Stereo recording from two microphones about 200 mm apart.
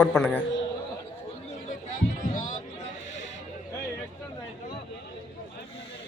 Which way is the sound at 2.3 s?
40° left (ahead or behind).